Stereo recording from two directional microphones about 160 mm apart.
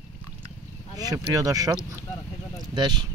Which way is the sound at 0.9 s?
20° right (ahead or behind).